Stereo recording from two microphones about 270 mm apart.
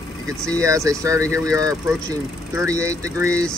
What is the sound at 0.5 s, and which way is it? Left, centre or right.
Speech, centre.